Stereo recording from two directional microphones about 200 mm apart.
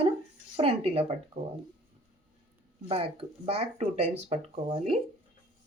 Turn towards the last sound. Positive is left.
turn(degrees=-30)  # may be behind; listen again after turning